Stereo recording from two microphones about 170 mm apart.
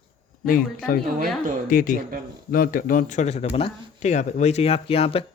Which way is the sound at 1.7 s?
55° left (ahead or behind).